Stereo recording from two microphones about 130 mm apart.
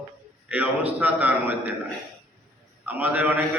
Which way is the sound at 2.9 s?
15° right (ahead or behind).